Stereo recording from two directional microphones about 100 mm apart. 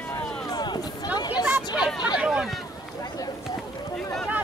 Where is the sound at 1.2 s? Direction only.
45° left (ahead or behind).